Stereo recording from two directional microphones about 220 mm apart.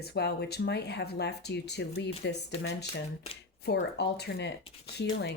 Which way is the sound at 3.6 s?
50° left (ahead or behind).